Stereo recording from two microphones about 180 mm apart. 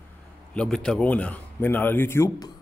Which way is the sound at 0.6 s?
5° left (ahead or behind).